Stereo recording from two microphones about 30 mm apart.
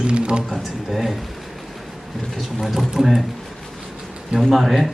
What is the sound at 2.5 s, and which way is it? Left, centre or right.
Speech, centre.